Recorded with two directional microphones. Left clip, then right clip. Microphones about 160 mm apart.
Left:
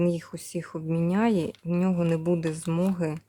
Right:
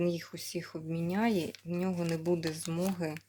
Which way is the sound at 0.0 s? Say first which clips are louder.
Left 6 dB; 40° left (ahead or behind).